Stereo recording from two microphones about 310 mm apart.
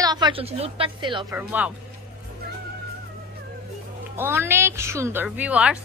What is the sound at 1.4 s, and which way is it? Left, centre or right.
Speech, centre.